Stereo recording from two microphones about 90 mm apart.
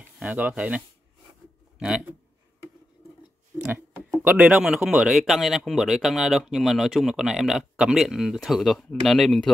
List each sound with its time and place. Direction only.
0.2 s a man's voice: 15° right (ahead or behind)
3.5 s a sound: 25° right (ahead or behind)
4.2 s speech: 15° right (ahead or behind); by 9.5 s 5° left (ahead or behind)